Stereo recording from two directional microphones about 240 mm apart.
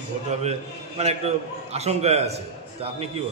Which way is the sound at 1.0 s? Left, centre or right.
Right.